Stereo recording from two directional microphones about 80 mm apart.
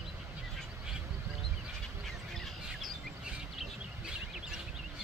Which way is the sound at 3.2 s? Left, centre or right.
Centre.